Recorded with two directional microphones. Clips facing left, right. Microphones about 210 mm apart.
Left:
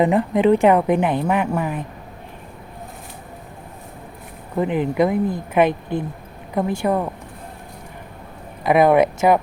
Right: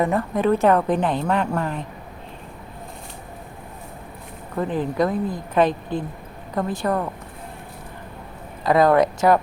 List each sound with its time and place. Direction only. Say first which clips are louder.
0.0 s a woman's voice: left 4 dB; 15° left (ahead or behind)
4.5 s a woman's voice: left 3 dB; 15° left (ahead or behind)
8.6 s a woman's voice: left 2 dB; 20° left (ahead or behind)